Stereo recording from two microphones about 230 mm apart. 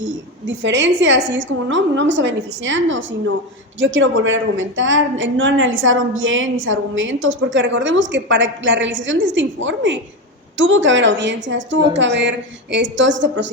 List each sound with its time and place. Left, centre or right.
0.4 s a woman's voice: right